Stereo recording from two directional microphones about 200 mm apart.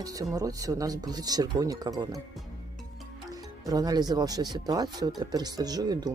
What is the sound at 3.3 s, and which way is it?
Speech, 20° right (ahead or behind).